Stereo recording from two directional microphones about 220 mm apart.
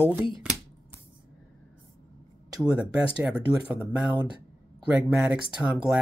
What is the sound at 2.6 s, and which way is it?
Speech, 5° right (ahead or behind).